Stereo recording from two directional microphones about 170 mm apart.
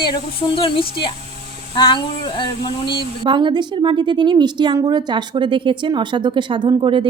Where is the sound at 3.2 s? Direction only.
30° right (ahead or behind).